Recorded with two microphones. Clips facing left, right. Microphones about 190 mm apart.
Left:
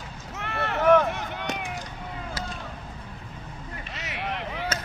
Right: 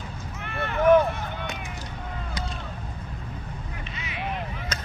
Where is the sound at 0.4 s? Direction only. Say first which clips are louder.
Right 1 dB; 75° left (ahead or behind).